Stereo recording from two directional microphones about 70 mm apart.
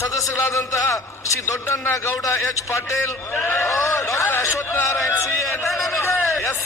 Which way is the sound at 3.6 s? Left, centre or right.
Left.